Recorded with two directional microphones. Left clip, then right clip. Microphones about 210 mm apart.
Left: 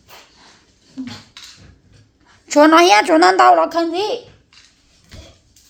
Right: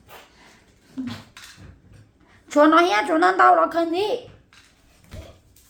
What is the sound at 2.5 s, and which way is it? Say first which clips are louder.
A woman's voice: left 6 dB; 35° left (ahead or behind).